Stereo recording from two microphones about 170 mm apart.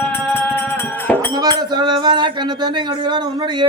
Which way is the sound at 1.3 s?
25° right (ahead or behind).